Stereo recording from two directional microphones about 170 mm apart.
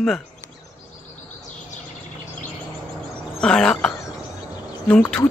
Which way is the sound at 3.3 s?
5° left (ahead or behind).